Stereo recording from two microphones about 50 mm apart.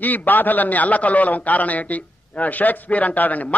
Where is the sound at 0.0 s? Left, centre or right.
Left.